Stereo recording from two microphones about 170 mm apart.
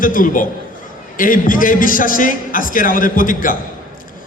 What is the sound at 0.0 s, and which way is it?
A man's voice, 55° left (ahead or behind).